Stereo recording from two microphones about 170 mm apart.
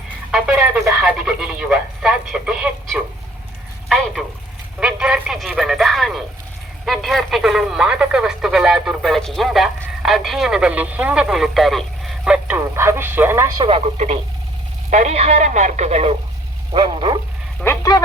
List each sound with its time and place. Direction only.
0.3 s speech: 5° right (ahead or behind)
13.6 s speech: 35° right (ahead or behind)
16.7 s a sound: 30° right (ahead or behind)
17.6 s speech: 10° left (ahead or behind)